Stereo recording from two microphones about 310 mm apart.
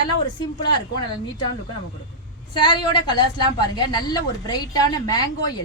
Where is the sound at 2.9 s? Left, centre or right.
Centre.